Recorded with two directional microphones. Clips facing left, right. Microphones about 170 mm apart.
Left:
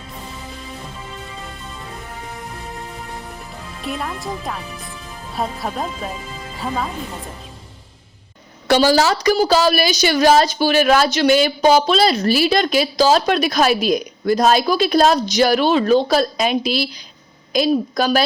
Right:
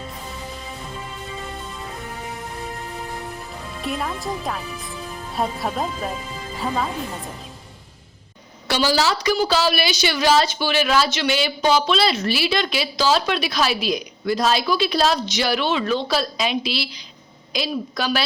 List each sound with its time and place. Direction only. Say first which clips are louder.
3.8 s speech: even; centre (ahead or behind)
8.6 s a woman's voice: left 6 dB; 50° left (ahead or behind)